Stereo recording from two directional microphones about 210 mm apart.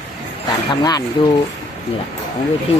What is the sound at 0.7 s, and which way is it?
Speech, 20° left (ahead or behind).